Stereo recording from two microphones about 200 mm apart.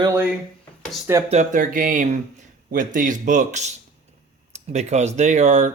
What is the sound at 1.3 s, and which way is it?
Speech, 40° right (ahead or behind).